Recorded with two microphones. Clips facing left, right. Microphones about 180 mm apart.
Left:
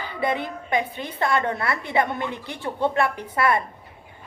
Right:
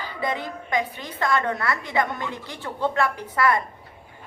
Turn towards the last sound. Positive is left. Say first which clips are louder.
# even
turn(degrees=25)  # may be behind; listen again after turning